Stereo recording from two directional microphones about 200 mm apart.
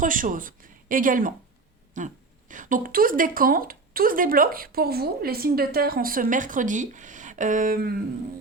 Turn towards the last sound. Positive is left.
turn(degrees=-45)  # may be behind; listen again after turning